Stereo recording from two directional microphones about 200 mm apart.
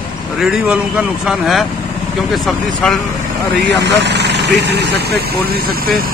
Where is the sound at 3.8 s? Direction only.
60° right (ahead or behind).